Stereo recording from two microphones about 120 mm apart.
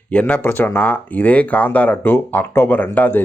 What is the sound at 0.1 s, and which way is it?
Speech, 10° left (ahead or behind).